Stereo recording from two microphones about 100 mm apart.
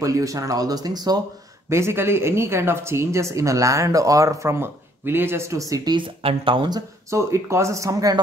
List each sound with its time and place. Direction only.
0.0 s speech: 35° right (ahead or behind)
1.7 s speech: 25° right (ahead or behind)
5.9 s speech: 60° right (ahead or behind)
7.1 s speech: 30° right (ahead or behind)